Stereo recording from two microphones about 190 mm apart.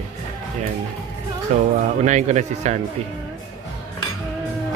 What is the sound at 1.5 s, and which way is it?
Speech, 35° right (ahead or behind).